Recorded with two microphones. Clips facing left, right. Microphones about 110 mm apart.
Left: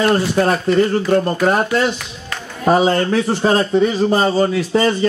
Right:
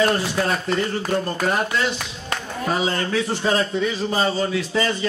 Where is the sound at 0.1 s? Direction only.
50° left (ahead or behind).